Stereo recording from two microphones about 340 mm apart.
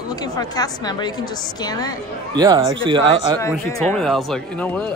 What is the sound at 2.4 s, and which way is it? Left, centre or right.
Speech, centre.